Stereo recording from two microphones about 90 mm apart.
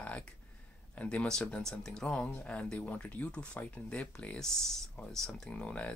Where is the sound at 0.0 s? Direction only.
15° left (ahead or behind).